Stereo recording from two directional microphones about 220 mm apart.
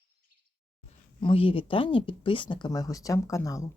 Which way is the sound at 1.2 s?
25° left (ahead or behind).